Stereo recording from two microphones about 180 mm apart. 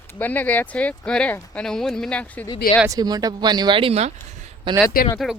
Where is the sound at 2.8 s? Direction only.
20° right (ahead or behind).